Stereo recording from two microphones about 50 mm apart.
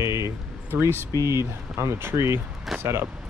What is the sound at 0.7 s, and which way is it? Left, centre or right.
Speech, right.